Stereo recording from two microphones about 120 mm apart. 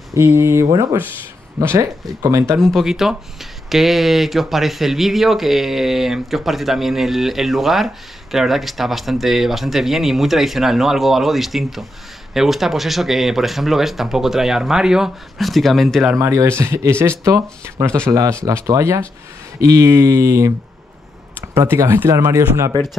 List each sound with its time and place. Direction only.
0.1 s speech: 20° right (ahead or behind)
2.6 s speech: centre (ahead or behind)
16.2 s speech: 25° right (ahead or behind)
21.5 s speech: 20° right (ahead or behind)